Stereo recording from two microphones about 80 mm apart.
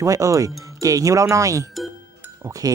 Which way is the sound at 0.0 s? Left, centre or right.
Right.